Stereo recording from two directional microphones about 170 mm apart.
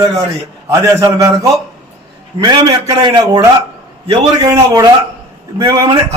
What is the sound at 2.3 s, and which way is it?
A man's voice, 25° right (ahead or behind).